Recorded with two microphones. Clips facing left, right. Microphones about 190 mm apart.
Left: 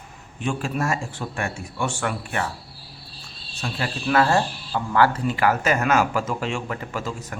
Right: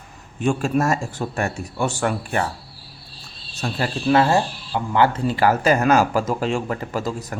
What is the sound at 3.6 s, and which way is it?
Speech, 35° right (ahead or behind).